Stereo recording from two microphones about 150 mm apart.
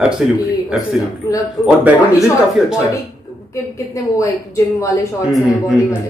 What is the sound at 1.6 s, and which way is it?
Speech, 10° right (ahead or behind).